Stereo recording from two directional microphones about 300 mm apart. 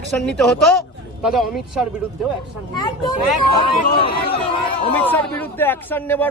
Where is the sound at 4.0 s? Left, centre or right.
Centre.